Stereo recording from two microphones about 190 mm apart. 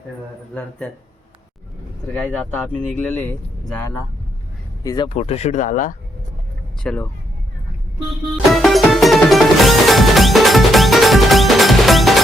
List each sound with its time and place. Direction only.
0.8 s speech: 5° left (ahead or behind)
2.2 s speech: 5° left (ahead or behind)
5.0 s speech: 35° left (ahead or behind)
6.8 s speech: 5° left (ahead or behind)
8.5 s music: centre (ahead or behind)